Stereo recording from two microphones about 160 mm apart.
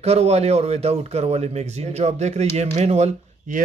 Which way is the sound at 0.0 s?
40° right (ahead or behind).